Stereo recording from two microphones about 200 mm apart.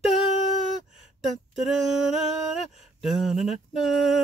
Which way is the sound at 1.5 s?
Centre (ahead or behind).